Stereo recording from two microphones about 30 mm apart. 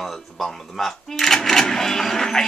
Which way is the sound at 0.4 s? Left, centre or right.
Centre.